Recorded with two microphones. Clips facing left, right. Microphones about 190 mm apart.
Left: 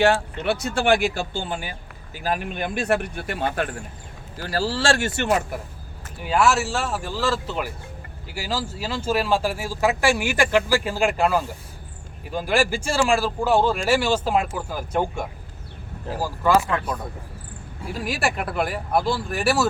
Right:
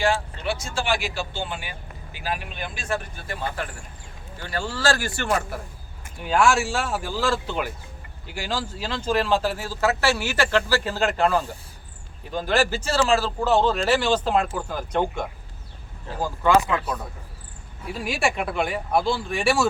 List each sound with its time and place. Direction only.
0.0 s speech: 60° left (ahead or behind)
4.4 s speech: 35° left (ahead or behind); by 5.5 s 20° left (ahead or behind)
6.1 s speech: 5° left (ahead or behind)
17.9 s speech: centre (ahead or behind)